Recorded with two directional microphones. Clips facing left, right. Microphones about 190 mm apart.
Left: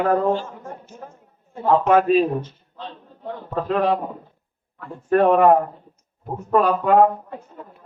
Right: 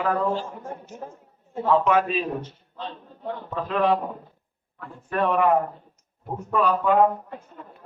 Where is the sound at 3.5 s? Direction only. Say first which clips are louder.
Left 5 dB; 50° left (ahead or behind).